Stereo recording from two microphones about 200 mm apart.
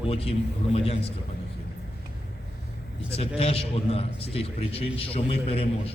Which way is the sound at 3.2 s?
30° left (ahead or behind).